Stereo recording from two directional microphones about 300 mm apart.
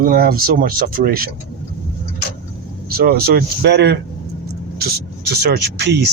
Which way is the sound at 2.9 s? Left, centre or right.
Right.